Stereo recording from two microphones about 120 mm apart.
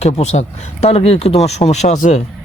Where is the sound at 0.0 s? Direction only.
65° left (ahead or behind).